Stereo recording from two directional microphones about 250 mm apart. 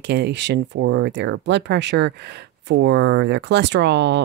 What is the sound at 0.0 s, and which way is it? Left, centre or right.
Speech, right.